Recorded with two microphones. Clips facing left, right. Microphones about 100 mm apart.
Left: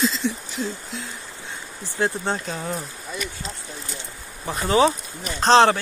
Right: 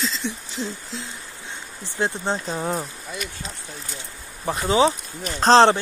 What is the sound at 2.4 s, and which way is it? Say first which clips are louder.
Speech: right 3 dB; 35° right (ahead or behind).